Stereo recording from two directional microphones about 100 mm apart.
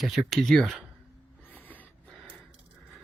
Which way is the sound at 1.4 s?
15° left (ahead or behind).